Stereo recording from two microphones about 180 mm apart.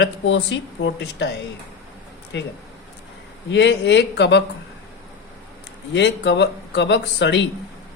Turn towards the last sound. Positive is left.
turn(degrees=75)  # may be behind; listen again after turning